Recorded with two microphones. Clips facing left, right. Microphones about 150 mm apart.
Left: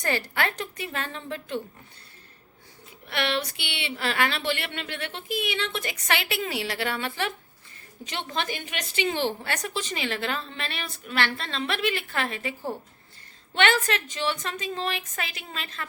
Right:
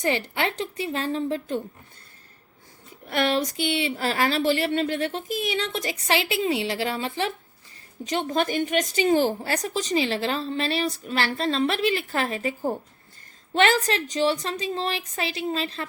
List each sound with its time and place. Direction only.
0.0 s a woman's voice: 25° right (ahead or behind)
3.1 s a woman's voice: 40° right (ahead or behind)
8.0 s a woman's voice: 40° right (ahead or behind)